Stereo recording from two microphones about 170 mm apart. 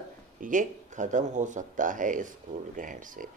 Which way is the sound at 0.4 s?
50° right (ahead or behind).